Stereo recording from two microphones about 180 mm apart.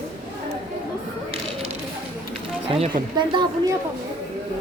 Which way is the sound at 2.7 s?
30° right (ahead or behind).